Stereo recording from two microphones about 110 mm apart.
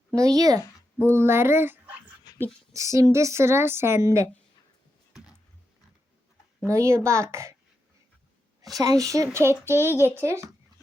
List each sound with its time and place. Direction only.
0.2 s speech: 35° right (ahead or behind)
1.0 s speech: 20° right (ahead or behind)
6.7 s speech: 25° right (ahead or behind)
8.8 s speech: 30° right (ahead or behind)